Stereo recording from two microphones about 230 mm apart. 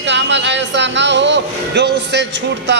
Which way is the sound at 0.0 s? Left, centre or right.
Right.